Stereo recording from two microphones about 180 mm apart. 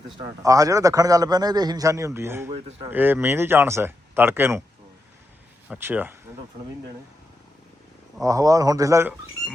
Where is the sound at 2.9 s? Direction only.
10° right (ahead or behind).